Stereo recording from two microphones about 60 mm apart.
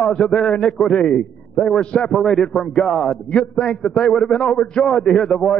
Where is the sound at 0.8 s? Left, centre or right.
Centre.